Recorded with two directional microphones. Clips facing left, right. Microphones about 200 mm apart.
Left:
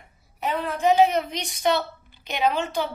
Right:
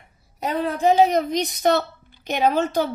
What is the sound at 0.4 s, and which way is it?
A woman's voice, 35° right (ahead or behind).